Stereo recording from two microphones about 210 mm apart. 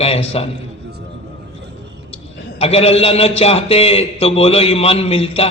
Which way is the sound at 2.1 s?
30° left (ahead or behind).